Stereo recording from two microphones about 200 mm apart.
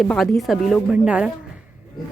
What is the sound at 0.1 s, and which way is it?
A woman's voice, centre (ahead or behind).